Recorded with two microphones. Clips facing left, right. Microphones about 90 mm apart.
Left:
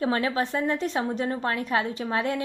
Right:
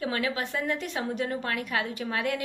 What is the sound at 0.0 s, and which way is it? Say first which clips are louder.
A woman's voice: left 5 dB; 30° left (ahead or behind).